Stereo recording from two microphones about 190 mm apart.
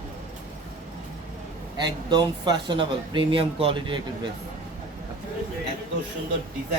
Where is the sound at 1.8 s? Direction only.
25° right (ahead or behind).